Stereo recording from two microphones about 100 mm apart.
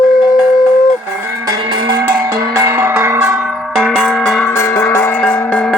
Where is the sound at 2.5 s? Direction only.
25° right (ahead or behind).